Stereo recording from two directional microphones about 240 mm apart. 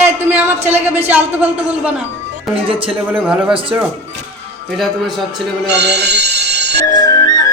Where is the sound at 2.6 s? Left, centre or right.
Right.